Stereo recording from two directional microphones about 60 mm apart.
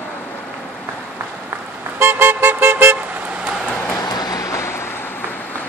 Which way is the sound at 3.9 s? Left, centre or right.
Left.